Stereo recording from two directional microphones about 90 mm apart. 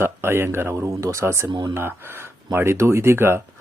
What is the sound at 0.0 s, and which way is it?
Speech, 25° right (ahead or behind).